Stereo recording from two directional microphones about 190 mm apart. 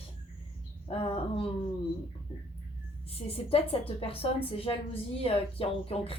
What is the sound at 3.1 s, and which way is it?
A woman's voice, 30° left (ahead or behind).